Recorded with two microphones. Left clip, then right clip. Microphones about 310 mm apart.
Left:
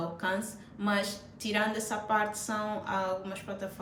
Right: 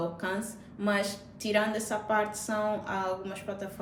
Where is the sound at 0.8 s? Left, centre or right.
Centre.